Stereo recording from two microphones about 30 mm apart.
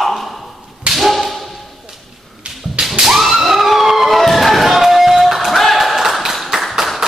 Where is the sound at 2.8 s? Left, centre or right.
Right.